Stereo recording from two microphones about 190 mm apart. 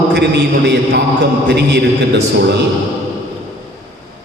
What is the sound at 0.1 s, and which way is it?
A man's voice, 60° right (ahead or behind).